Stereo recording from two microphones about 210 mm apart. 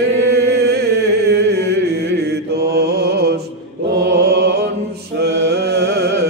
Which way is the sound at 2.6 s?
50° right (ahead or behind).